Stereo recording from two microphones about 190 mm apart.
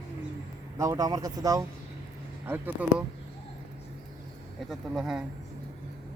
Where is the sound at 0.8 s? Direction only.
20° right (ahead or behind).